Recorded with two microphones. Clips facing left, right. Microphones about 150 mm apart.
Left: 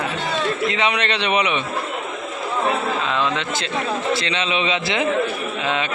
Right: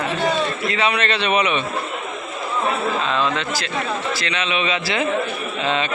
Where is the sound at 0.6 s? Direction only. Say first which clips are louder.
Even; 20° left (ahead or behind).